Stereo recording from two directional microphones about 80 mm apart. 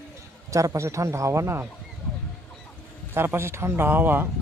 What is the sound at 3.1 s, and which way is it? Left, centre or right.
Speech, right.